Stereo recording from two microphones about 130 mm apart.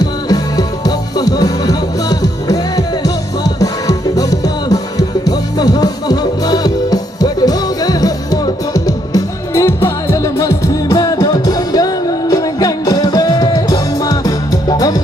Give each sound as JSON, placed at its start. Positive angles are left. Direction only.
{"t": 0.0, "sound": "music", "side_deg": 30}